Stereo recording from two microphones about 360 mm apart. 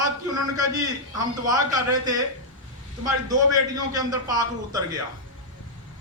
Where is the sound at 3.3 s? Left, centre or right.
Centre.